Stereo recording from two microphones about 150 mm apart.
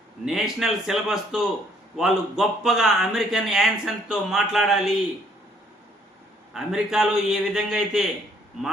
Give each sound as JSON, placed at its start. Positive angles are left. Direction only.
{"t": 0.3, "sound": "a man's voice", "side_deg": 0}
{"t": 6.5, "sound": "a man's voice", "side_deg": -5}